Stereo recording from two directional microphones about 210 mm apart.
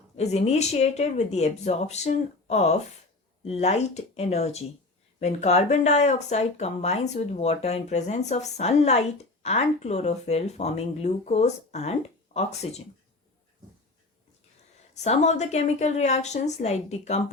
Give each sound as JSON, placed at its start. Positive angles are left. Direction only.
{"t": 0.2, "sound": "speech", "side_deg": 30}
{"t": 14.9, "sound": "speech", "side_deg": 30}